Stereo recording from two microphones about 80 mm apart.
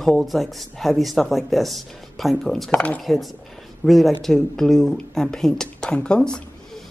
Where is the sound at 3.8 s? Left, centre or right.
Centre.